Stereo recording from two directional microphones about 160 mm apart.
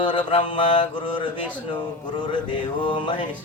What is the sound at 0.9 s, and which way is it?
Mantra, 30° left (ahead or behind).